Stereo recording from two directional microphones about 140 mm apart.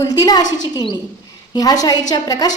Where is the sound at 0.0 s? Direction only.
25° left (ahead or behind).